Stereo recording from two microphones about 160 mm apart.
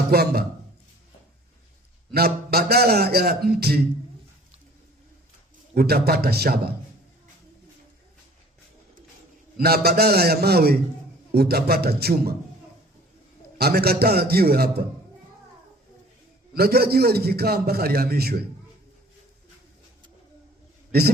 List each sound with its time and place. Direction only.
0.1 s a man's voice: 75° right (ahead or behind)
2.1 s a man's voice: 75° right (ahead or behind)
5.7 s a man's voice: 75° right (ahead or behind)
9.6 s a man's voice: 75° right (ahead or behind)
13.6 s a man's voice: 75° right (ahead or behind)
16.6 s a man's voice: 75° right (ahead or behind)